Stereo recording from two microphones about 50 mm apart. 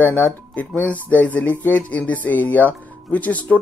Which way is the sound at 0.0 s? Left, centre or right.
Left.